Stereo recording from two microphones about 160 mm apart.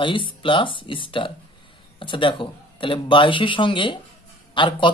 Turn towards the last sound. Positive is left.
turn(degrees=30)  # may be behind; listen again after turning